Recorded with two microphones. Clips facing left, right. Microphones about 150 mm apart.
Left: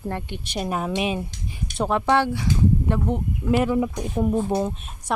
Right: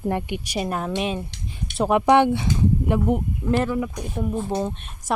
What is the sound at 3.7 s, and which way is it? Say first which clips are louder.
Speech: left 3 dB; 20° left (ahead or behind).